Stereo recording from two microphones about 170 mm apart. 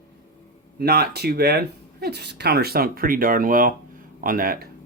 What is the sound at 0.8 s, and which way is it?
Speech, 70° right (ahead or behind).